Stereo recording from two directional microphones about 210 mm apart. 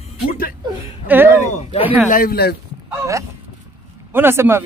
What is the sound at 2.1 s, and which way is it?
Speech, 45° left (ahead or behind).